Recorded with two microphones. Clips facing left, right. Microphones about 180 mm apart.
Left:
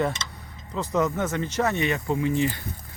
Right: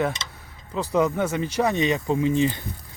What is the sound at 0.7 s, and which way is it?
Speech, 15° right (ahead or behind).